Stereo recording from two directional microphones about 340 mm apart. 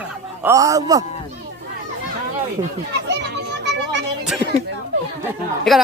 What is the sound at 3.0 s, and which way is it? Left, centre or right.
Children playing, right.